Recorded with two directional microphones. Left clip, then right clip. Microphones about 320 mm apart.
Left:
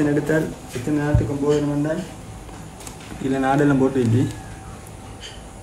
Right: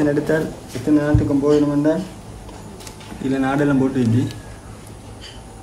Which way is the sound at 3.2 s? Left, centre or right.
Centre.